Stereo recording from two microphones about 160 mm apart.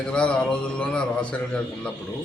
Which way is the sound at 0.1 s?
5° left (ahead or behind).